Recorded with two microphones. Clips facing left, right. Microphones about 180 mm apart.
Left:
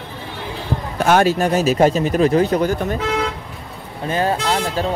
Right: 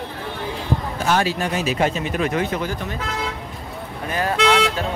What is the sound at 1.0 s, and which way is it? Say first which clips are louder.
Speech: left 7 dB; 50° left (ahead or behind).